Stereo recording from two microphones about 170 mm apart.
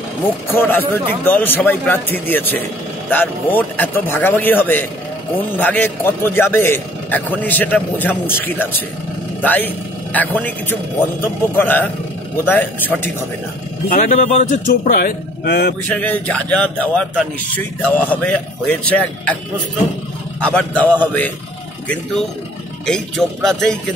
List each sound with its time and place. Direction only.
0.5 s a man's voice: 10° left (ahead or behind)
13.8 s speech: 50° left (ahead or behind); by 15.7 s 65° left (ahead or behind)
15.9 s a man's voice: 10° left (ahead or behind)
20.3 s a man's voice: 5° left (ahead or behind)
22.8 s speech: 5° left (ahead or behind)